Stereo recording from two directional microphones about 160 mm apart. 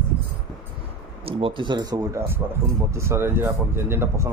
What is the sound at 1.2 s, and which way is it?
Speech, 35° right (ahead or behind).